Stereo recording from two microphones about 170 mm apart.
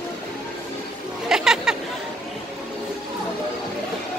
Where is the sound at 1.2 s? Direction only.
5° right (ahead or behind).